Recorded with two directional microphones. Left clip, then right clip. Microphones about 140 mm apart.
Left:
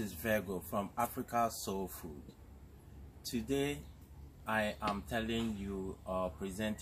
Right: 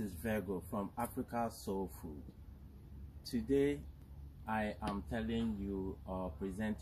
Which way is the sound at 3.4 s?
20° left (ahead or behind).